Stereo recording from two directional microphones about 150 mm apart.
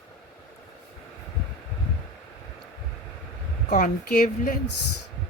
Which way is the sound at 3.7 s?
70° left (ahead or behind).